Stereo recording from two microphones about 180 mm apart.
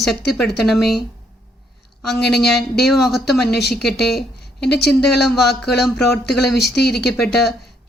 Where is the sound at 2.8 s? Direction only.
Centre (ahead or behind).